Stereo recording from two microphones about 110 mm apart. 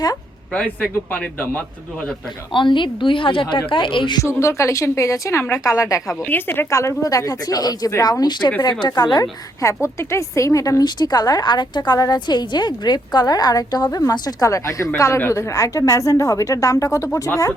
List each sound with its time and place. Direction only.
0.5 s speech: 10° left (ahead or behind)
2.5 s a woman's voice: 45° left (ahead or behind)
4.2 s a woman's voice: 25° left (ahead or behind)
9.6 s speech: 25° left (ahead or behind)